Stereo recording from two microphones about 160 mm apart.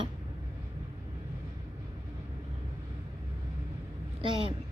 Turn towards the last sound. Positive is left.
turn(degrees=-30)  # may be behind; listen again after turning